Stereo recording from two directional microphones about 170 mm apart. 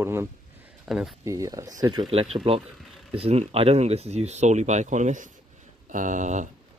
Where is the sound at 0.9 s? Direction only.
Centre (ahead or behind).